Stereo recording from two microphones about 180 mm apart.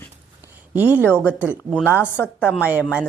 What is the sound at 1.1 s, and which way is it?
Speech, 10° right (ahead or behind).